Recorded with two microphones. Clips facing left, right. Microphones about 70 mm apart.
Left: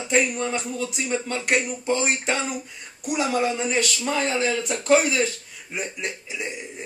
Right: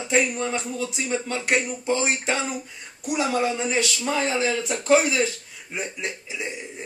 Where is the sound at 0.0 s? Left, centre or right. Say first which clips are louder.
Even; centre.